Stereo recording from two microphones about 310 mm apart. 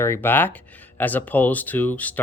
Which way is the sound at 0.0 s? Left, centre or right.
Centre.